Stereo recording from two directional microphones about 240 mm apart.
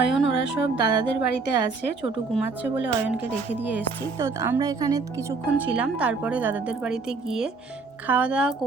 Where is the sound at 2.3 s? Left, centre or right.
Centre.